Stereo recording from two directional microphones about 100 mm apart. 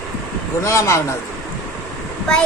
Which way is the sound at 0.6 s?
30° left (ahead or behind).